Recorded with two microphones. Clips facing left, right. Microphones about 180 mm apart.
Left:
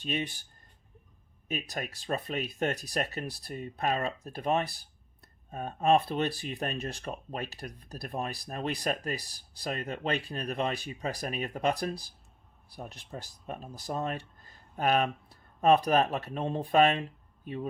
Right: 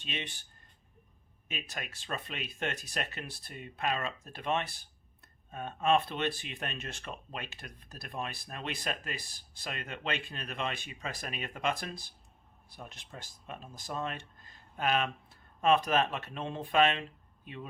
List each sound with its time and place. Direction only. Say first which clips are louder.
0.0 s speech: left 8 dB; 40° left (ahead or behind)
1.5 s speech: left 6 dB; 40° left (ahead or behind)